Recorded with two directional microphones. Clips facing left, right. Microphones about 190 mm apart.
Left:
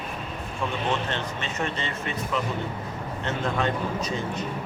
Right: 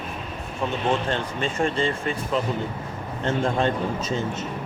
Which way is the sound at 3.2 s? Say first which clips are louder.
Right 4 dB; 30° right (ahead or behind).